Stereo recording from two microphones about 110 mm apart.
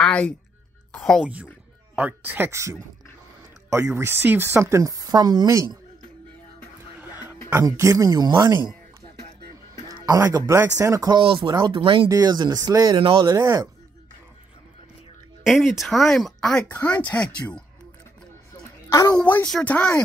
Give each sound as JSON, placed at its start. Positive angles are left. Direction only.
{"t": 0.0, "sound": "a sound", "side_deg": 10}
{"t": 0.9, "sound": "speech", "side_deg": 5}
{"t": 1.2, "sound": "a woman's voice", "side_deg": -10}
{"t": 7.6, "sound": "speech", "side_deg": -30}
{"t": 9.8, "sound": "speech", "side_deg": -30}
{"t": 11.2, "sound": "speech", "side_deg": -55}
{"t": 12.1, "sound": "speech", "side_deg": -35}
{"t": 13.0, "sound": "speech", "side_deg": -50}
{"t": 13.3, "sound": "speech", "side_deg": -30}
{"t": 15.4, "sound": "speech", "side_deg": -5}
{"t": 18.9, "sound": "a woman's voice", "side_deg": 30}
{"t": 19.1, "sound": "speech", "side_deg": 15}